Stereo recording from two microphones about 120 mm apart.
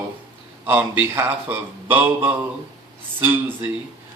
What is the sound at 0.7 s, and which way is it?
A woman's voice, 15° right (ahead or behind).